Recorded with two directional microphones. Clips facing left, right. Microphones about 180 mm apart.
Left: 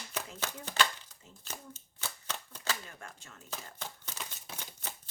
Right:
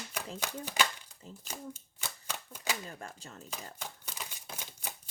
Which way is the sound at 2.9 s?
35° right (ahead or behind).